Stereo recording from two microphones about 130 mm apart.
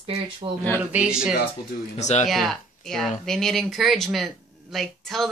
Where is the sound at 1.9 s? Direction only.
60° left (ahead or behind).